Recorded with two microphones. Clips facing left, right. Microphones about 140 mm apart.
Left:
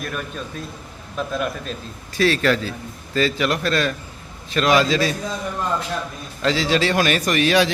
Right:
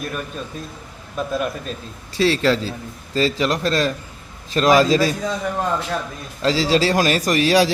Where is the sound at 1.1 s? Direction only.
5° right (ahead or behind).